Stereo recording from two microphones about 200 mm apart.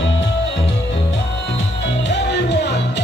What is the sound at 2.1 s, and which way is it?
Music, 60° left (ahead or behind).